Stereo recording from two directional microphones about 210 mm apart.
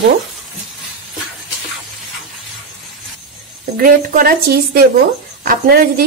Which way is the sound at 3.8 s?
40° right (ahead or behind).